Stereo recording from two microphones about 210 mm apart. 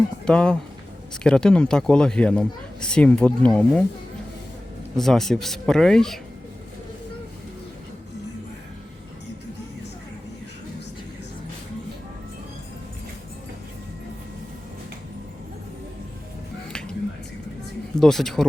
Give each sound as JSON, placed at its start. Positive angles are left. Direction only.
{"t": 0.3, "sound": "speech", "side_deg": 5}
{"t": 4.9, "sound": "speech", "side_deg": 0}
{"t": 18.0, "sound": "speech", "side_deg": 0}